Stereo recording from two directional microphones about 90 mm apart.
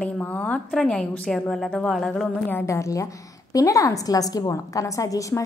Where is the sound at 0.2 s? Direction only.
15° left (ahead or behind).